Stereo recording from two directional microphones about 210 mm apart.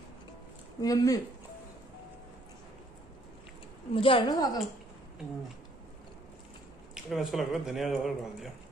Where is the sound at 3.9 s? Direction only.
25° left (ahead or behind).